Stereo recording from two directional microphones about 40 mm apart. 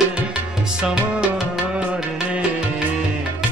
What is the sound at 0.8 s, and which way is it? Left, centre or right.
Music, right.